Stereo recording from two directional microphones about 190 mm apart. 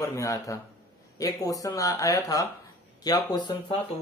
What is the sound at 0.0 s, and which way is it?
Speech, 15° left (ahead or behind).